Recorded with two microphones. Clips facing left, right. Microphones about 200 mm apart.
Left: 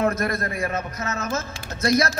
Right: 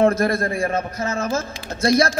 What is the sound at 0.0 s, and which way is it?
A man's voice, 30° right (ahead or behind).